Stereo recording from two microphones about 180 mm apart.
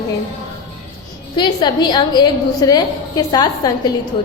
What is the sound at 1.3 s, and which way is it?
A woman's voice, 25° left (ahead or behind).